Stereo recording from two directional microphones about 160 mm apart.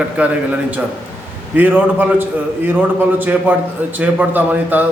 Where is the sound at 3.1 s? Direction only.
10° right (ahead or behind).